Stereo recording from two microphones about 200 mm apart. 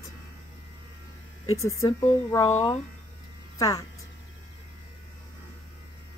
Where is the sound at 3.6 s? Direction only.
15° left (ahead or behind).